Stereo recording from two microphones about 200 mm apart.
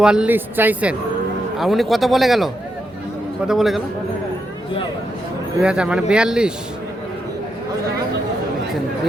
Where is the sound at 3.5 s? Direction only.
Centre (ahead or behind).